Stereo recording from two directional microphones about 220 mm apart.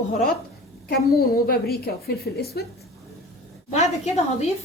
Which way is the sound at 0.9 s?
45° left (ahead or behind).